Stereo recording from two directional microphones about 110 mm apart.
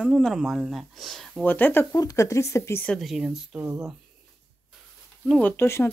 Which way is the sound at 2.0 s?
30° left (ahead or behind).